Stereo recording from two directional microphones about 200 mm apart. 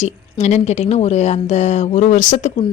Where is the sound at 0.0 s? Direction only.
35° left (ahead or behind).